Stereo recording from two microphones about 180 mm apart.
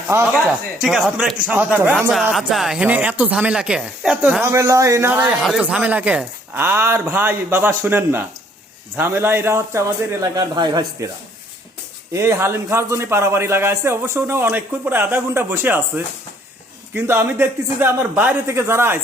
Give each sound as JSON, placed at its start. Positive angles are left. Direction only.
{"t": 0.1, "sound": "speech", "side_deg": -15}
{"t": 0.8, "sound": "speech", "side_deg": 0}
{"t": 12.1, "sound": "speech", "side_deg": -15}
{"t": 16.9, "sound": "speech", "side_deg": -15}